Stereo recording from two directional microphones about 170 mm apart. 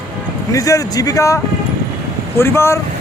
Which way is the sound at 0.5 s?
20° left (ahead or behind).